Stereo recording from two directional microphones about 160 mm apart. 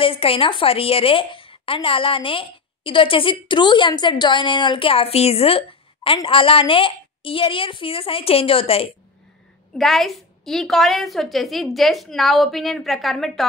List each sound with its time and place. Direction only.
0.0 s a woman's voice: 35° left (ahead or behind)
9.8 s a woman's voice: centre (ahead or behind)